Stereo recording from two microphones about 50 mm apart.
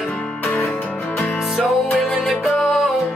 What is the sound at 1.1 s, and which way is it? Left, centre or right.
Music, left.